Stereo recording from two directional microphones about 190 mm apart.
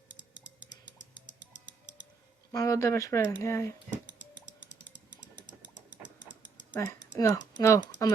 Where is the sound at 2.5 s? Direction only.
15° left (ahead or behind).